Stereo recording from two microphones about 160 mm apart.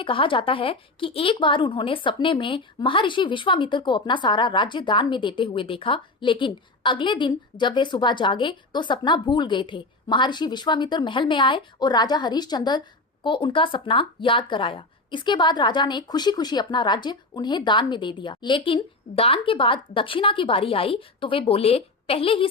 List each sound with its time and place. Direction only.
0.0 s a woman's voice: 30° left (ahead or behind)